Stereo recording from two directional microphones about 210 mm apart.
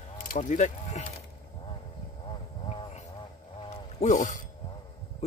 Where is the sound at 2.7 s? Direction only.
30° left (ahead or behind).